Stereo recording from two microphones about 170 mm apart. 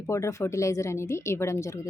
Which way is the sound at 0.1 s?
15° left (ahead or behind).